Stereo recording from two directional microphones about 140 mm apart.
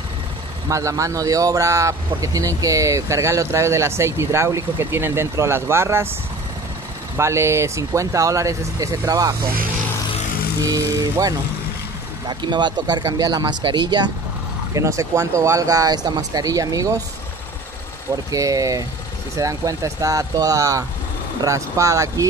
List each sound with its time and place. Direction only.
0.7 s speech: 25° right (ahead or behind)
7.2 s speech: 20° right (ahead or behind)
10.6 s speech: 25° right (ahead or behind)
14.7 s speech: 20° right (ahead or behind)
18.1 s speech: 25° right (ahead or behind)